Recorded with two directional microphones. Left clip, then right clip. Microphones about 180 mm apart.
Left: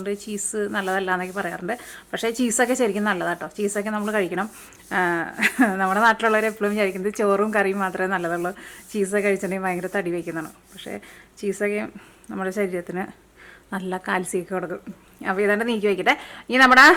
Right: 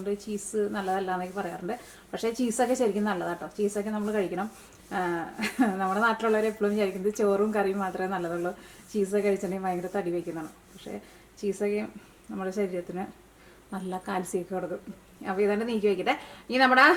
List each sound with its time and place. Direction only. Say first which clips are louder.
0.0 s speech: left 4 dB; 25° left (ahead or behind)
11.6 s speech: left 6 dB; 25° left (ahead or behind)